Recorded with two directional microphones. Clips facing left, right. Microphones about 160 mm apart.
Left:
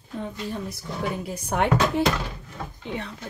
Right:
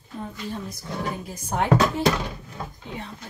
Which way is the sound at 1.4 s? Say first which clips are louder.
Left 2 dB; 65° left (ahead or behind).